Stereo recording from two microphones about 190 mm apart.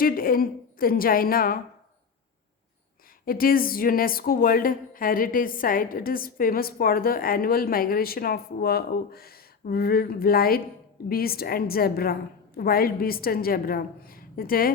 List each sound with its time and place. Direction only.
0.0 s speech: 50° left (ahead or behind)
3.2 s speech: 50° left (ahead or behind)